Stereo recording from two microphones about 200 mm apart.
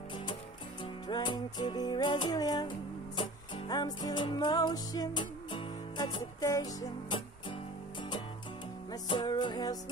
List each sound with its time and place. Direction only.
1.0 s music: 20° left (ahead or behind)
8.9 s music: 20° left (ahead or behind)